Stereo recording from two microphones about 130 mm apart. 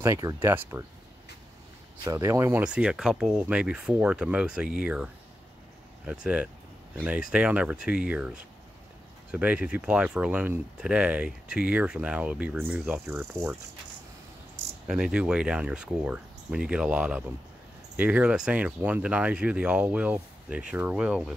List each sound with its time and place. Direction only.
0.0 s speech: 25° right (ahead or behind)
2.0 s speech: 25° right (ahead or behind)
2.6 s speech: 5° right (ahead or behind)
6.2 s speech: 10° right (ahead or behind)
13.1 s speech: 20° right (ahead or behind)
14.9 s speech: 5° right (ahead or behind)